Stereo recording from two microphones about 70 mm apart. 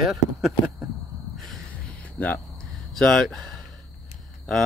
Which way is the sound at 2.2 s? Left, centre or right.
Left.